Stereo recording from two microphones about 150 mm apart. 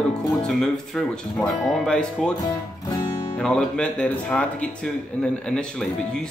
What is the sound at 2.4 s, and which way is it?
Music, 25° left (ahead or behind).